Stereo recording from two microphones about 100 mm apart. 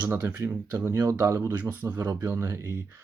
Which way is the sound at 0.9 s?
35° right (ahead or behind).